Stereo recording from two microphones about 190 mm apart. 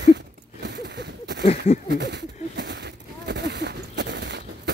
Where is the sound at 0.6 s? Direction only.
60° right (ahead or behind).